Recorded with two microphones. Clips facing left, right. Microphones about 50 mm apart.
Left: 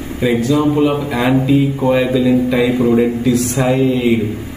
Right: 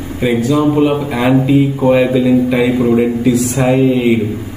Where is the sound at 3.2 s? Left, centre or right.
Centre.